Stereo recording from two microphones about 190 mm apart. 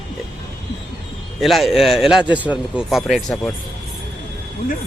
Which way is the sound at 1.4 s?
Centre (ahead or behind).